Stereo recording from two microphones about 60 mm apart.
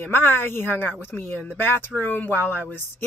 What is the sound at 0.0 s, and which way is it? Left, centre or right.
Speech, left.